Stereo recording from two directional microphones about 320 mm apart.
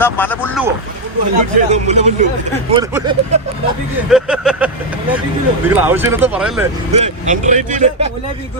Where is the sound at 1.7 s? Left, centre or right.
Right.